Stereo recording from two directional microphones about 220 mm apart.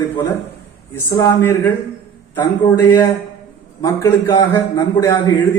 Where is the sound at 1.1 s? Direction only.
10° left (ahead or behind).